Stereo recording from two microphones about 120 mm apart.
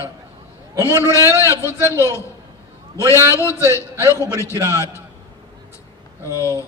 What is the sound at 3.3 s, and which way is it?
A man's voice, 25° left (ahead or behind).